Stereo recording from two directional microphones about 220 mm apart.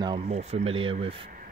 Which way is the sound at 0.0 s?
25° right (ahead or behind).